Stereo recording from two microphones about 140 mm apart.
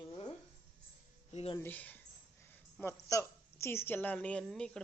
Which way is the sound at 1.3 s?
45° left (ahead or behind).